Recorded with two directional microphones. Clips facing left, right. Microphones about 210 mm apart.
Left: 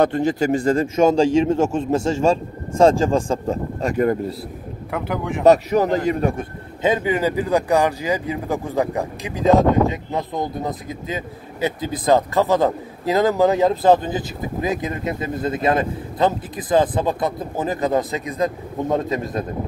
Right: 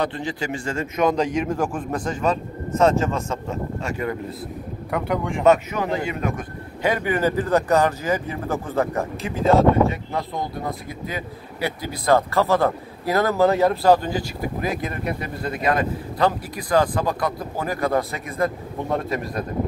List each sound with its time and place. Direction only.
0.0 s a man's voice: 45° left (ahead or behind)
4.9 s speech: centre (ahead or behind)
5.4 s a man's voice: 35° left (ahead or behind); by 19.4 s 20° left (ahead or behind)